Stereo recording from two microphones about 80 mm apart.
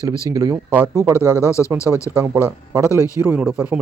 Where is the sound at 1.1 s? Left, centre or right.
Left.